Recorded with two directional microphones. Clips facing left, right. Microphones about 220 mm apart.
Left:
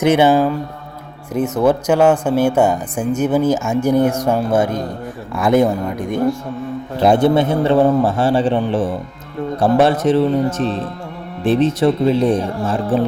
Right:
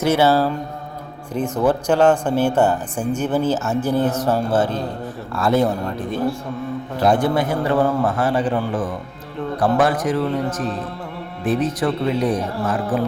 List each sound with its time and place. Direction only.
0.0 s a man's voice: 15° left (ahead or behind)